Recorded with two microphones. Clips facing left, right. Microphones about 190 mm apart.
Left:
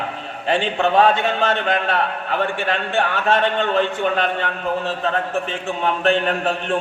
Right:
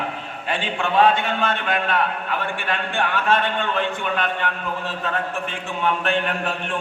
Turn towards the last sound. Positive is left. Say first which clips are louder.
# left 5 dB
turn(degrees=40)  # may be behind; listen again after turning